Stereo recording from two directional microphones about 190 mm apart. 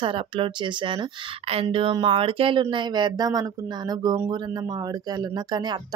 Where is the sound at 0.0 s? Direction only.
25° right (ahead or behind).